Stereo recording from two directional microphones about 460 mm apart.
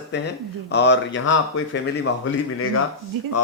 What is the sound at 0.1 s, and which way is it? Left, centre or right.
A man's voice, left.